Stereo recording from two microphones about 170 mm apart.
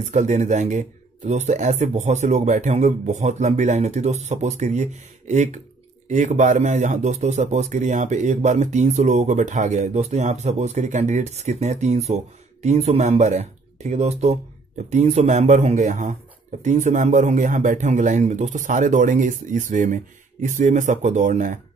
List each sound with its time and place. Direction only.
0.0 s a man's voice: 40° right (ahead or behind)